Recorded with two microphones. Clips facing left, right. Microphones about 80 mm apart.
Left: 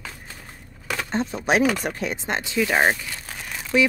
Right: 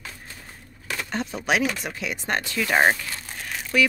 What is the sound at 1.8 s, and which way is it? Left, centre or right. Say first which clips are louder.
Speech: left 4 dB; left.